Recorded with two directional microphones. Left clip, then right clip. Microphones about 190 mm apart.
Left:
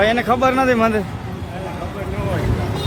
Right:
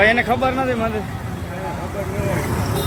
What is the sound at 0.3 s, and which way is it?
Speech, 45° left (ahead or behind).